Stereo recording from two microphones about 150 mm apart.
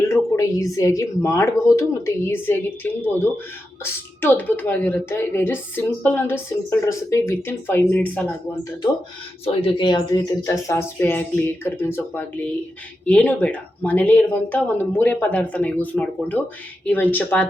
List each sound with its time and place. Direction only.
0.1 s a woman's voice: 20° left (ahead or behind)
9.4 s a woman's voice: 40° left (ahead or behind); by 17.5 s 10° left (ahead or behind)